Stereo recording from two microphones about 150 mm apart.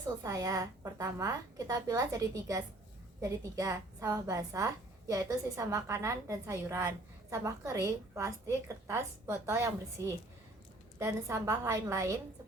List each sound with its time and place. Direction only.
0.2 s a woman's voice: 25° right (ahead or behind)